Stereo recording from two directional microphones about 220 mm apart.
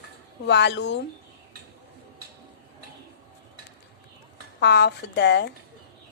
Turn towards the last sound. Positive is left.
turn(degrees=50)  # may be behind; listen again after turning